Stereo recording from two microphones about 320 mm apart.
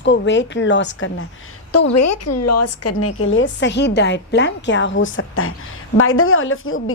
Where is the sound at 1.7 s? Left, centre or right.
Left.